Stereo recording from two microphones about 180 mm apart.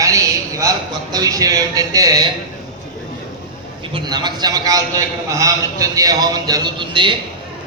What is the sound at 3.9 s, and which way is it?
Speech, 25° right (ahead or behind).